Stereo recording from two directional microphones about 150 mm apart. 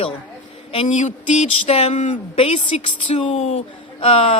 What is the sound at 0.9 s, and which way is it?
A woman's voice, 50° left (ahead or behind).